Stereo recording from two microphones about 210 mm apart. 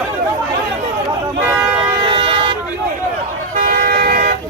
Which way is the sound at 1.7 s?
25° right (ahead or behind).